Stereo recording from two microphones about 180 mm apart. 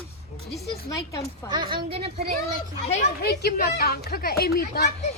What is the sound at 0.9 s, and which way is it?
Speech, 15° left (ahead or behind).